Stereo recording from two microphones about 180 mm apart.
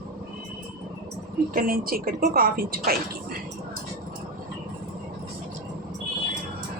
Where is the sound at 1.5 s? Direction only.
55° right (ahead or behind).